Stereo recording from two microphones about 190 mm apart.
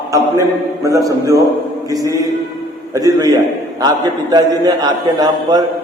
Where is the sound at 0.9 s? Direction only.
15° right (ahead or behind).